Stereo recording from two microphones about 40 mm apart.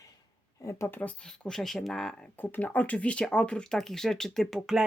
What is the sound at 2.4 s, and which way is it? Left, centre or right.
Speech, left.